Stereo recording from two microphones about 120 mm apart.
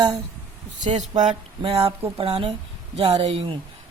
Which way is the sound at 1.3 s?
55° right (ahead or behind).